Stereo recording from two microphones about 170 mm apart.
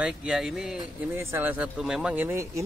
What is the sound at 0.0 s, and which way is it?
Speech, 5° right (ahead or behind).